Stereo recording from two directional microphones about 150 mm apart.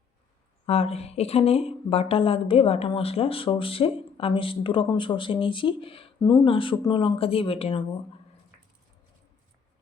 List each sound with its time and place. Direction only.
0.6 s speech: 45° left (ahead or behind)